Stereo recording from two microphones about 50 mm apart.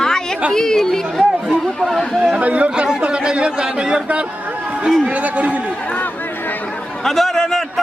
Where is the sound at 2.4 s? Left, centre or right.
Right.